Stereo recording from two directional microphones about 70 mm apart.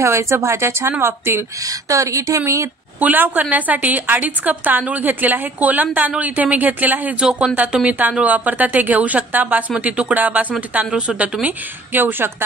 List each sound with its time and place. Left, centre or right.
0.0 s speech: right
1.6 s speech: right
3.0 s a woman's voice: right
7.2 s a woman's voice: centre
10.9 s a woman's voice: centre
11.4 s a woman's voice: right